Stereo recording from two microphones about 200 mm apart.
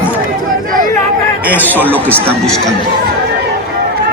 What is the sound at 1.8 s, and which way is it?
Speech, 10° right (ahead or behind).